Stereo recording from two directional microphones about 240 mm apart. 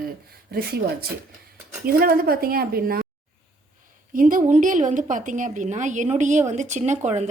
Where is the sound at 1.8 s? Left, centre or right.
Right.